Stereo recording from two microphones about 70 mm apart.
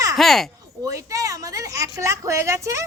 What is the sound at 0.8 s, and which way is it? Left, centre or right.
A woman's voice, right.